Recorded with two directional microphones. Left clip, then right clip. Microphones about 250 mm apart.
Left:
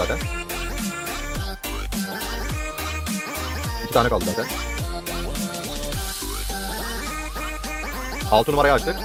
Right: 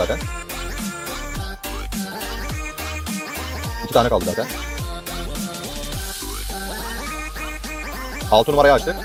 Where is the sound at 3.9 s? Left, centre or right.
Centre.